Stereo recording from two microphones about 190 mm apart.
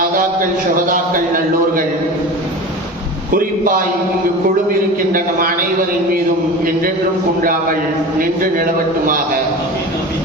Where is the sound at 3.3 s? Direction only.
50° right (ahead or behind).